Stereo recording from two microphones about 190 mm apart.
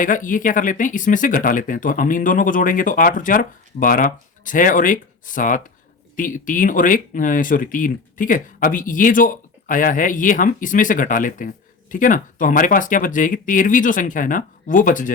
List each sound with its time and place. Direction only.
0.0 s speech: 45° left (ahead or behind)